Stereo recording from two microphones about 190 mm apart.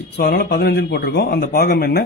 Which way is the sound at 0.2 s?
55° left (ahead or behind).